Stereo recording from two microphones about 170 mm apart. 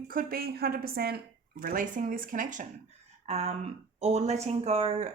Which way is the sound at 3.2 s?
40° right (ahead or behind).